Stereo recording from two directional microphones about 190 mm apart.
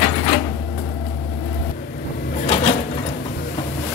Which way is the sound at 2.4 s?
35° left (ahead or behind).